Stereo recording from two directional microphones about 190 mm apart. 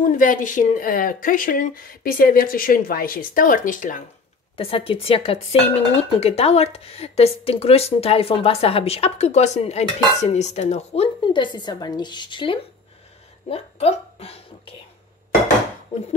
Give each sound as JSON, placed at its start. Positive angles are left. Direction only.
{"t": 0.0, "sound": "a woman's voice", "side_deg": 45}
{"t": 4.6, "sound": "speech", "side_deg": 30}